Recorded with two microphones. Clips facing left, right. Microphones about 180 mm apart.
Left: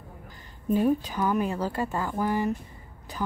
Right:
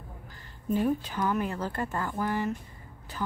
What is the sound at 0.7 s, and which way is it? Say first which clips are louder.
A woman's voice: left 4 dB; 15° left (ahead or behind).